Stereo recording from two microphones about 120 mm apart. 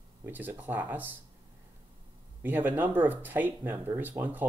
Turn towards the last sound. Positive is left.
turn(degrees=-15)  # may be behind; listen again after turning